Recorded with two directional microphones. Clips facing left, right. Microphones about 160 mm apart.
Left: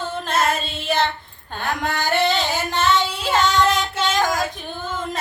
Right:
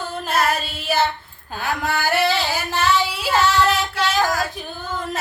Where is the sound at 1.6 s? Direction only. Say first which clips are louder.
Right 1 dB; 5° right (ahead or behind).